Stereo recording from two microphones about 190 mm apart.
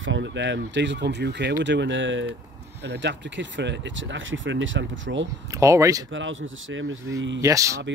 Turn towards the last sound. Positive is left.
turn(degrees=-15)  # may be behind; listen again after turning